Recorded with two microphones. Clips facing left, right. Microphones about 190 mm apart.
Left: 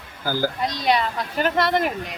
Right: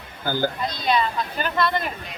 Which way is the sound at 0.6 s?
75° left (ahead or behind).